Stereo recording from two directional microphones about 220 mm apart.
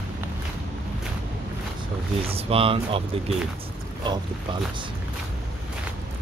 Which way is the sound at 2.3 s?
25° right (ahead or behind).